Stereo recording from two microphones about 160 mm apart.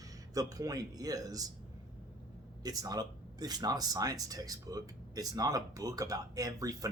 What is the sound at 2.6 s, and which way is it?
Speech, 25° right (ahead or behind).